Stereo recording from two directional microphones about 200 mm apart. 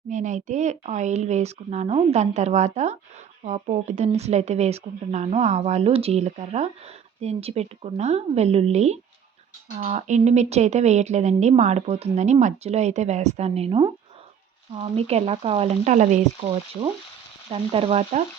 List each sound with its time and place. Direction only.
0.1 s speech: 40° right (ahead or behind)
17.5 s frying: 30° right (ahead or behind)